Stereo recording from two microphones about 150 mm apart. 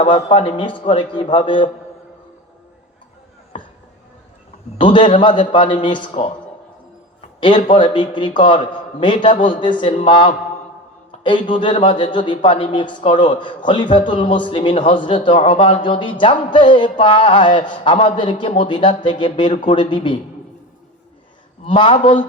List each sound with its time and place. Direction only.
0.0 s speech: 35° left (ahead or behind)
4.8 s speech: 35° left (ahead or behind)
7.3 s a man's voice: 35° left (ahead or behind)
21.7 s speech: 35° left (ahead or behind)